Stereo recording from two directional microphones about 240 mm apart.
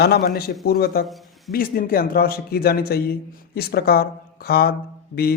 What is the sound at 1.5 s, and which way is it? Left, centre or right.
A man's voice, left.